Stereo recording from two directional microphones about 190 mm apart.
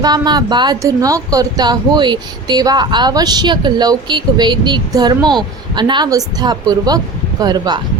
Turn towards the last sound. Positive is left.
turn(degrees=-20)  # may be behind; listen again after turning